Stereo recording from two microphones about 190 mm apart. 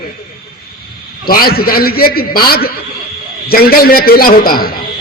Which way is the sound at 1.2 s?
50° left (ahead or behind).